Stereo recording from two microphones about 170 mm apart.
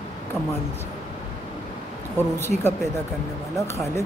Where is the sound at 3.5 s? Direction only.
15° left (ahead or behind).